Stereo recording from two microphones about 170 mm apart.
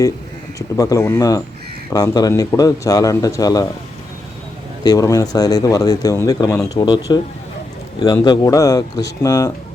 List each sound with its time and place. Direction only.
0.8 s speech: 20° left (ahead or behind)
4.8 s speech: 20° left (ahead or behind)